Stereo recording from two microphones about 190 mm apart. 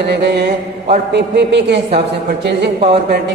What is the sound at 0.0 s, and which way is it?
A woman's voice, 60° right (ahead or behind).